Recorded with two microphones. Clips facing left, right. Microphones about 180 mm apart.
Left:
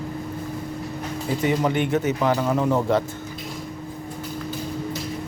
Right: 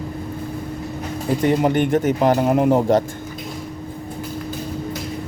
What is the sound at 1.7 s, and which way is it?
Speech, 50° right (ahead or behind).